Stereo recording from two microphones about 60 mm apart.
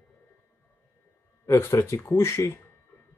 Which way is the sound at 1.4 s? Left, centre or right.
Left.